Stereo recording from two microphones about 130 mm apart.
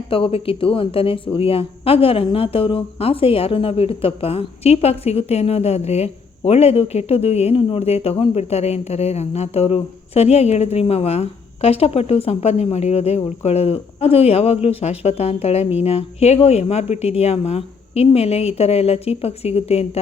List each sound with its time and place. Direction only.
0.1 s a woman's voice: 45° left (ahead or behind)